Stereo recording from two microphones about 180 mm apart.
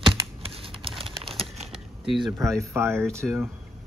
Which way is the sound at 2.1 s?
Centre (ahead or behind).